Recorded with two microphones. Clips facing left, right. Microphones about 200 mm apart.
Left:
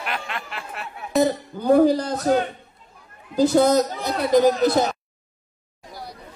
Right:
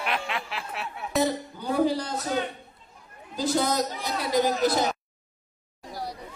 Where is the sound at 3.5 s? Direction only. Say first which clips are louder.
Left 6 dB; 50° left (ahead or behind).